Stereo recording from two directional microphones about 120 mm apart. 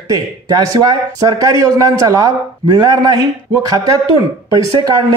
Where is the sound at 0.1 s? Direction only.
30° right (ahead or behind).